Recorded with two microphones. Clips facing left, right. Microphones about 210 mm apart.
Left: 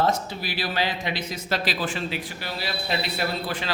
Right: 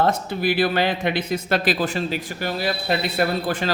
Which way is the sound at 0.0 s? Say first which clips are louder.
Right 4 dB; 55° right (ahead or behind).